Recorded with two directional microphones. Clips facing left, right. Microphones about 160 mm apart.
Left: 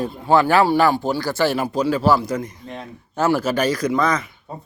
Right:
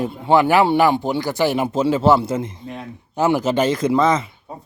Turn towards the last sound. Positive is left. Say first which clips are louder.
# left 1 dB
turn(degrees=-10)  # may be behind; listen again after turning